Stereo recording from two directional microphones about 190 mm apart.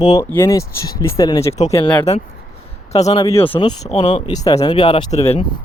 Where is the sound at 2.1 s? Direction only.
35° left (ahead or behind).